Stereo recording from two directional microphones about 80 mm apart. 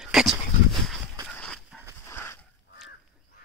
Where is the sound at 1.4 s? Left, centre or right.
Centre.